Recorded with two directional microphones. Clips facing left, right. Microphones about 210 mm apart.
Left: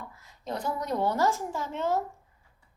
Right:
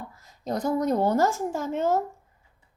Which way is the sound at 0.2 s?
40° right (ahead or behind).